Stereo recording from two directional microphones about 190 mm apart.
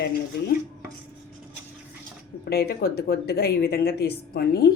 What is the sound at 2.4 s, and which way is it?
Speech, 55° left (ahead or behind).